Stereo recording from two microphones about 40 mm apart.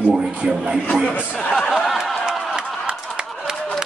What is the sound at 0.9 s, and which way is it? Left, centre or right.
Speech, left.